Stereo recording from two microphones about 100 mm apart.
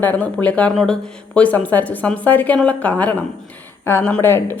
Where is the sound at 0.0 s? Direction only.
15° left (ahead or behind).